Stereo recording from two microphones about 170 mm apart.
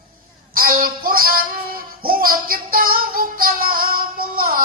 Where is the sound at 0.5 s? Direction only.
60° right (ahead or behind).